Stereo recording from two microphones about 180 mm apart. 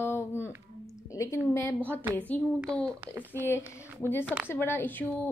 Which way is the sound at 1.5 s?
10° left (ahead or behind).